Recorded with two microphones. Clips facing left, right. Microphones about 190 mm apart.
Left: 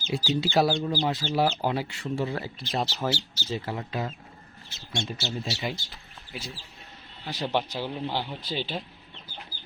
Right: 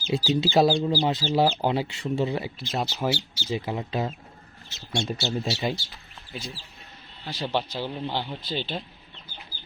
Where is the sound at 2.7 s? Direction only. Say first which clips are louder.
Right 1 dB; 5° right (ahead or behind); by 4.1 s 20° right (ahead or behind).